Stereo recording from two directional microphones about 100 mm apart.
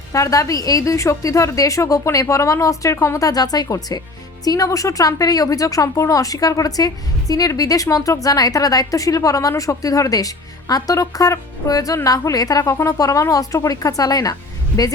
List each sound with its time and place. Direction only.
0.1 s speech: 35° left (ahead or behind)